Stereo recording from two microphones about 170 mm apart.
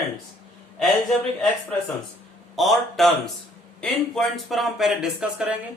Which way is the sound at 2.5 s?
Centre (ahead or behind).